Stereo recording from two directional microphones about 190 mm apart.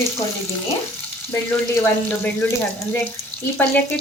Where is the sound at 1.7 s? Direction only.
10° left (ahead or behind).